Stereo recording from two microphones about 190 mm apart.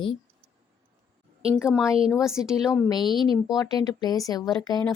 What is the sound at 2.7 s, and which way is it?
A woman's voice, 20° left (ahead or behind).